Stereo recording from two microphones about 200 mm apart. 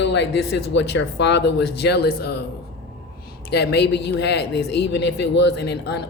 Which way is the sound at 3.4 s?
55° left (ahead or behind).